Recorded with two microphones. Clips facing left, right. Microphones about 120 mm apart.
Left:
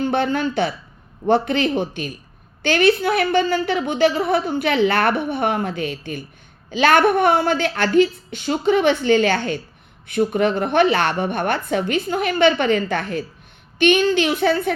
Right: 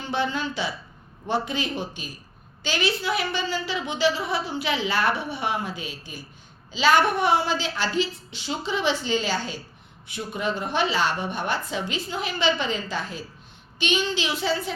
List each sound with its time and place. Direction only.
0.0 s a woman's voice: 55° left (ahead or behind)